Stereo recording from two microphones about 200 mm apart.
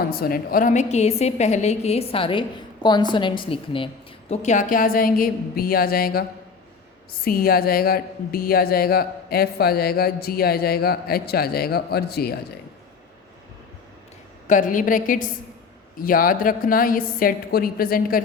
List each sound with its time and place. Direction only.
0.1 s a woman's voice: 50° left (ahead or behind); by 3.8 s 25° left (ahead or behind)
4.3 s speech: 35° left (ahead or behind)
7.3 s speech: 50° left (ahead or behind)
14.4 s a woman's voice: 40° left (ahead or behind)